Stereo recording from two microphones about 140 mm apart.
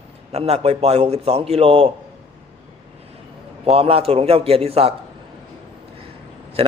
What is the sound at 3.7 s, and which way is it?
Speech, 45° right (ahead or behind).